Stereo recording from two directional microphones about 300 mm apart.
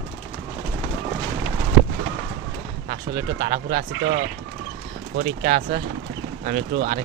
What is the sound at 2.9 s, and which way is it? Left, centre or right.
Speech, right.